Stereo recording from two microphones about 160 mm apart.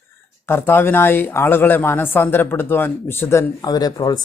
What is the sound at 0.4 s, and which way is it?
Speech, 15° left (ahead or behind).